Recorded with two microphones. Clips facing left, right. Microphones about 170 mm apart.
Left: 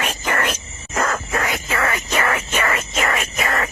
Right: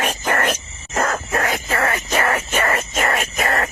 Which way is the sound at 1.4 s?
45° right (ahead or behind).